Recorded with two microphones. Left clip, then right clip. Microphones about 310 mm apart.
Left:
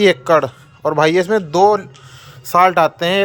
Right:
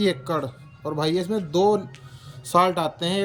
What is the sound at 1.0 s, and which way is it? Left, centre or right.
Speech, centre.